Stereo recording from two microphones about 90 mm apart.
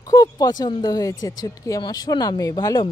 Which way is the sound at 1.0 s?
45° left (ahead or behind).